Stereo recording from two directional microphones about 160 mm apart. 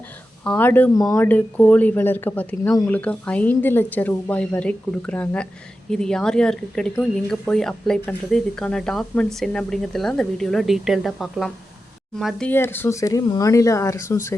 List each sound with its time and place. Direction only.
0.4 s speech: 10° left (ahead or behind)
0.9 s speech: 20° left (ahead or behind)
1.2 s speech: 10° left (ahead or behind)